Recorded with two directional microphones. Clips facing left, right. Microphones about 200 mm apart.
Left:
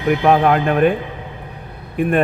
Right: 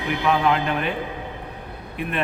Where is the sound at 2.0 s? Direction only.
50° left (ahead or behind).